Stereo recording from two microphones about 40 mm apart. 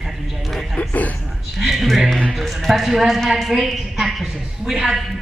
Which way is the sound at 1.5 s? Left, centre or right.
Centre.